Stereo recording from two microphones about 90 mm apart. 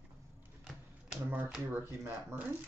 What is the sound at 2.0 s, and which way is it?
Speech, 25° right (ahead or behind).